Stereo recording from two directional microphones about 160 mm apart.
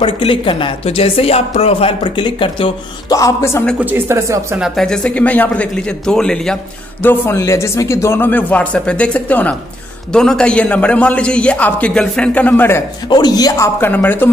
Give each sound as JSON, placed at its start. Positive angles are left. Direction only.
{"t": 0.0, "sound": "speech", "side_deg": 35}
{"t": 3.8, "sound": "speech", "side_deg": -15}
{"t": 4.6, "sound": "a man's voice", "side_deg": 0}
{"t": 13.1, "sound": "a man's voice", "side_deg": 25}